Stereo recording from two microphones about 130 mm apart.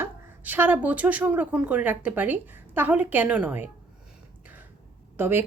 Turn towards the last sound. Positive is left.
turn(degrees=-15)  # may be behind; listen again after turning